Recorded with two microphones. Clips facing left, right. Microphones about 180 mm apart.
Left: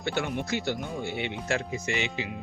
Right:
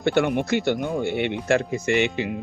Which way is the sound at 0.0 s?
60° right (ahead or behind).